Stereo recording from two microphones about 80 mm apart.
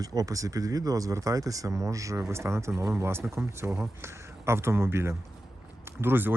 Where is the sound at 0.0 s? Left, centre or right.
Right.